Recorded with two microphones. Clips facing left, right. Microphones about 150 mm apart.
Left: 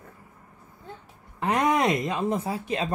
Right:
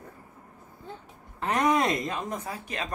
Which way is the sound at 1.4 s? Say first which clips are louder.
Left 2 dB; 20° left (ahead or behind).